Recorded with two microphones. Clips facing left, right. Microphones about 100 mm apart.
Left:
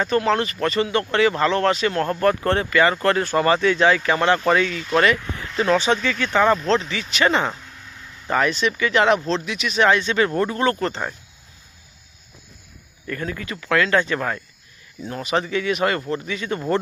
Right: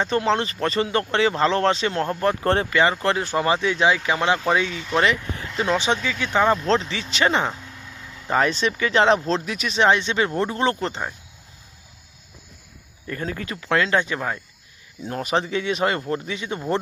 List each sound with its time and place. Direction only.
0.0 s speech: 25° right (ahead or behind)
6.7 s speech: 30° right (ahead or behind)
9.7 s speech: 25° right (ahead or behind)
13.1 s speech: 30° right (ahead or behind); by 14.4 s 15° right (ahead or behind)
15.1 s speech: 40° right (ahead or behind)
16.4 s speech: 20° right (ahead or behind)